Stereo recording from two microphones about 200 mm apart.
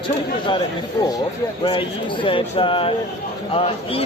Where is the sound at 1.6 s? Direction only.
25° left (ahead or behind).